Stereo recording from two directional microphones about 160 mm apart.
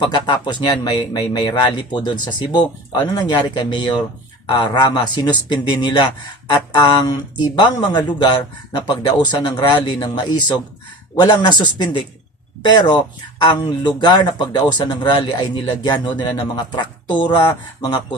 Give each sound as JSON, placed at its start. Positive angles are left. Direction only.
{"t": 0.0, "sound": "speech", "side_deg": 30}